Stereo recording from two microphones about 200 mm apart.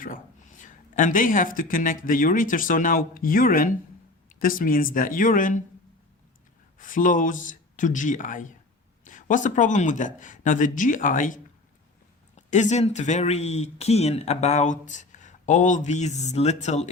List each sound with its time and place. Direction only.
0.0 s speech: 40° left (ahead or behind)
6.7 s speech: 40° left (ahead or behind)
12.5 s speech: 35° left (ahead or behind)